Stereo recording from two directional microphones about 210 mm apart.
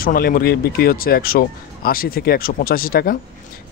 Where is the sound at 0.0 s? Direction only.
45° left (ahead or behind).